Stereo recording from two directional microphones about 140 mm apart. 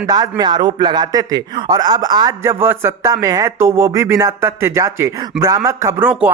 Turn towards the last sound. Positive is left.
turn(degrees=-20)  # may be behind; listen again after turning